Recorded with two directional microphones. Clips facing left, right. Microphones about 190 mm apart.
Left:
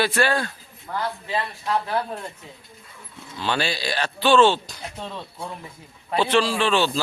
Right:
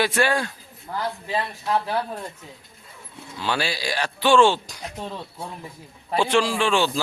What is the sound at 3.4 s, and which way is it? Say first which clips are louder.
Speech: left 1 dB; 10° right (ahead or behind).